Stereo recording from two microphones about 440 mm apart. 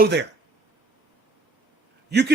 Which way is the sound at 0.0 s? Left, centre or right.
Right.